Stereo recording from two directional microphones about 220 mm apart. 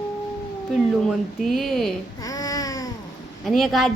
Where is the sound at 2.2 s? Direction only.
15° left (ahead or behind).